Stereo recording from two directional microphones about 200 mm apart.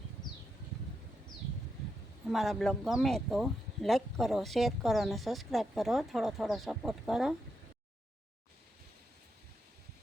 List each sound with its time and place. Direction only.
2.3 s speech: centre (ahead or behind)